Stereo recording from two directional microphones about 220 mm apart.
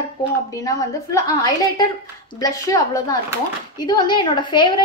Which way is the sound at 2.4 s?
15° left (ahead or behind).